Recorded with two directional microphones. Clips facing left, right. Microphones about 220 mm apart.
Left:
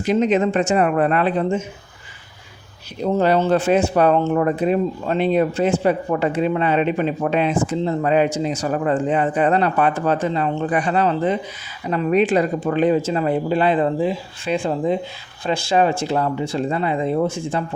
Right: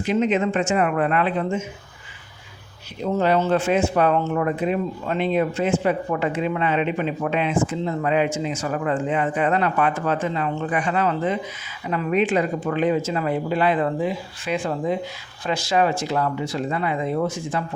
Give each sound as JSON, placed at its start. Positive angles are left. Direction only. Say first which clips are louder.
{"t": 0.0, "sound": "speech", "louder": "left 3 dB", "side_deg": 40}
{"t": 3.0, "sound": "speech", "louder": "left 3 dB", "side_deg": 35}